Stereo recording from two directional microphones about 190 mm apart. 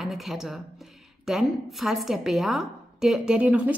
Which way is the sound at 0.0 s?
Centre (ahead or behind).